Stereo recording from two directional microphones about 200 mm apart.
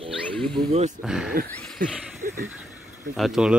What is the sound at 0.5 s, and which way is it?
Speech, 35° right (ahead or behind).